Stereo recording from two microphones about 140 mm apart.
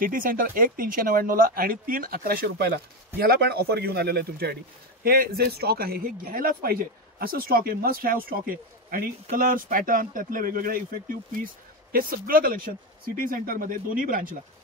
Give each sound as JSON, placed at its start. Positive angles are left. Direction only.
{"t": 0.0, "sound": "speech", "side_deg": -85}
{"t": 5.0, "sound": "speech", "side_deg": -90}